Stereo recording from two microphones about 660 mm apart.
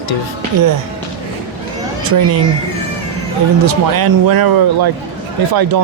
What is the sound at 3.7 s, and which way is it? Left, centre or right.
Speech, right.